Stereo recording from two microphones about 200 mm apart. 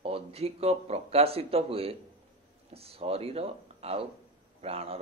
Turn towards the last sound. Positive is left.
turn(degrees=-30)  # may be behind; listen again after turning